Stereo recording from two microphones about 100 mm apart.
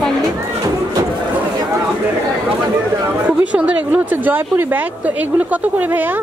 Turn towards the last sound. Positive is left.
turn(degrees=-15)  # may be behind; listen again after turning